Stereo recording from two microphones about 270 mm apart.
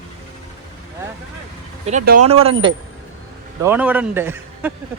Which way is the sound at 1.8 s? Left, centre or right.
Right.